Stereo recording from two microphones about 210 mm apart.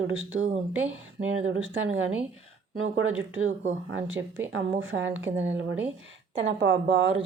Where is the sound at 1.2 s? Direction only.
65° right (ahead or behind).